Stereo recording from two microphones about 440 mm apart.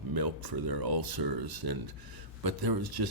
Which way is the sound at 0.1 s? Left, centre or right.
Right.